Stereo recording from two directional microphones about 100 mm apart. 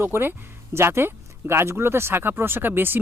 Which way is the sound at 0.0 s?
25° right (ahead or behind).